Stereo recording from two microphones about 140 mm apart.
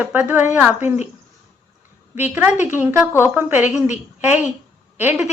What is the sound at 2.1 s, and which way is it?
A woman's voice, 15° right (ahead or behind).